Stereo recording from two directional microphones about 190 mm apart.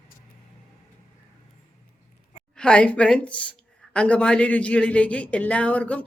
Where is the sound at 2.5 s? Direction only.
5° left (ahead or behind).